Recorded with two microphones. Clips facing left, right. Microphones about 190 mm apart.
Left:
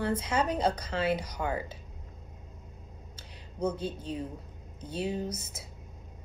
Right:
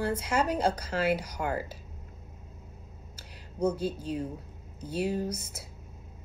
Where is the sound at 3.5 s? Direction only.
10° right (ahead or behind).